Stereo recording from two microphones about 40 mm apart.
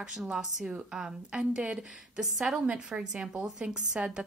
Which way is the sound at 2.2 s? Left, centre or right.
Centre.